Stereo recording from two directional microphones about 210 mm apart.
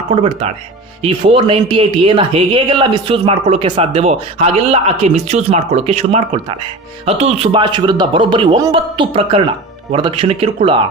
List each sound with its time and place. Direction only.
0.1 s speech: 25° right (ahead or behind)